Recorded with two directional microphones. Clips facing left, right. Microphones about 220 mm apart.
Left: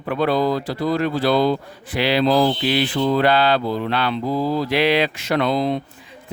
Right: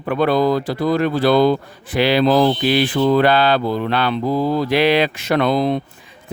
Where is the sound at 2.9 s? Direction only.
70° right (ahead or behind).